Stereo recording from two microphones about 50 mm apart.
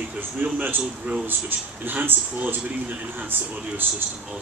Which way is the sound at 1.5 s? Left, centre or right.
Right.